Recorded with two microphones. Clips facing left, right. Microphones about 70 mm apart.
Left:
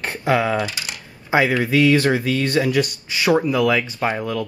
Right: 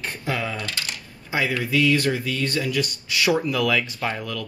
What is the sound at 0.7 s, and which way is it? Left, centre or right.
Coin, centre.